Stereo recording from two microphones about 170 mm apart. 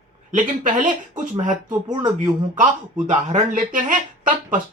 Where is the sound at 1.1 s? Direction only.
50° right (ahead or behind).